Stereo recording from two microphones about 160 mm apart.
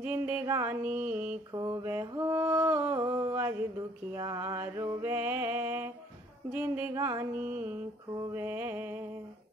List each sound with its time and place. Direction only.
0.0 s music: 10° right (ahead or behind)
1.5 s mantra: 25° right (ahead or behind)
2.0 s music: 20° right (ahead or behind)